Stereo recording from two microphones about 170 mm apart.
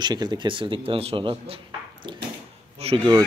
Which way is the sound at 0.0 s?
25° right (ahead or behind).